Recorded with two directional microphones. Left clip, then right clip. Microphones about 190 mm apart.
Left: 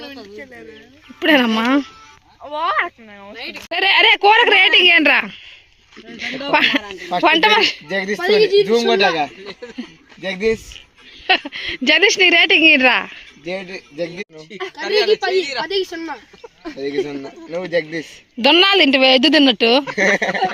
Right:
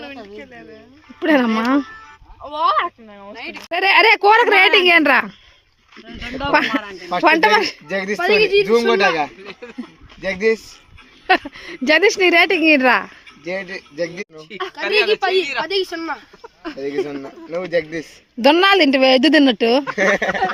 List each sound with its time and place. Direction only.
1.2 s speech: centre (ahead or behind)
7.9 s a man's voice: 25° left (ahead or behind)
8.2 s speech: 5° right (ahead or behind)
8.9 s a man's voice: 25° left (ahead or behind)
9.4 s speech: centre (ahead or behind)
10.2 s a man's voice: 25° left (ahead or behind)
11.3 s speech: centre (ahead or behind)
13.4 s a man's voice: 25° left (ahead or behind)
14.6 s speech: centre (ahead or behind)
16.7 s speech: 35° left (ahead or behind)
18.3 s speech: 10° right (ahead or behind)
20.0 s speech: 35° left (ahead or behind)